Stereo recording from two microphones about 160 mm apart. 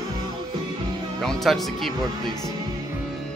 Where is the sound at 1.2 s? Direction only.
Centre (ahead or behind).